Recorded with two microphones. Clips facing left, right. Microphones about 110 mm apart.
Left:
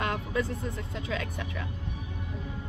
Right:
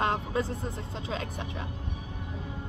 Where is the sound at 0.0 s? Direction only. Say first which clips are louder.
Right 2 dB; 30° right (ahead or behind).